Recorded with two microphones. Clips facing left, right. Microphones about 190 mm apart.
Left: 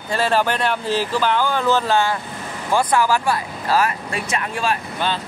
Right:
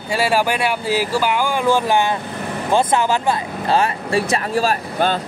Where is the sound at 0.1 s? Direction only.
10° right (ahead or behind).